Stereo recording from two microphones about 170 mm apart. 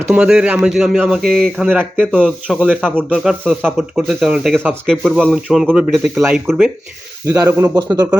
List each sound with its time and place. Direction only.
0.0 s speech: 5° right (ahead or behind)
7.3 s speech: 15° right (ahead or behind)